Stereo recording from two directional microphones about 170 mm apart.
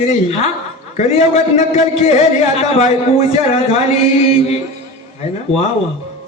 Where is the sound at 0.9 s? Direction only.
40° left (ahead or behind).